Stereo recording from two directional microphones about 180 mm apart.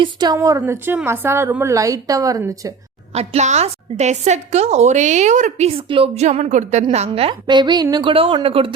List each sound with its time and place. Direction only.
0.0 s a woman's voice: 25° right (ahead or behind)
0.3 s a woman's voice: 15° right (ahead or behind)
3.2 s a woman's voice: 40° right (ahead or behind)